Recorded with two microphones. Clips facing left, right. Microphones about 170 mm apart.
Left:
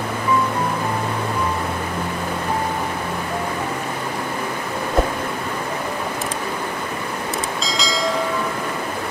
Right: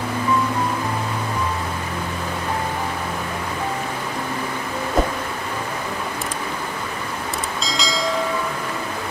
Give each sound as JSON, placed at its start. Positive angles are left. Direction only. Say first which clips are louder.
{"t": 7.6, "sound": "train", "louder": "even", "side_deg": 0}